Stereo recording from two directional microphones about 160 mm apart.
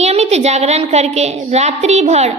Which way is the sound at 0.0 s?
45° right (ahead or behind).